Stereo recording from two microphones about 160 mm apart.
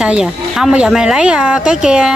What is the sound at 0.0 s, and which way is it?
Speech, 5° right (ahead or behind).